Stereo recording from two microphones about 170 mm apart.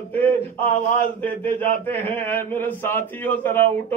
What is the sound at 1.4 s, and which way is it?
Speech, 10° left (ahead or behind).